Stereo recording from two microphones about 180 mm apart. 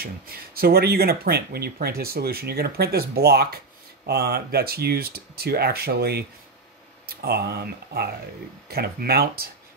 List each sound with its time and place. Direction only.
0.0 s speech: 55° right (ahead or behind)